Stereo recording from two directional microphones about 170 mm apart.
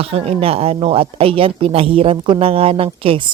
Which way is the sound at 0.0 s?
35° right (ahead or behind).